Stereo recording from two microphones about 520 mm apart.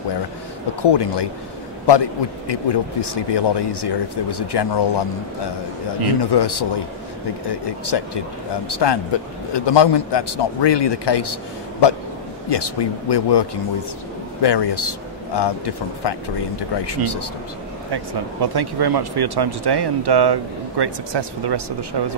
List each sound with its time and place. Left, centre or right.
0.8 s speech: left
6.3 s speech: left
12.4 s speech: left
17.9 s speech: right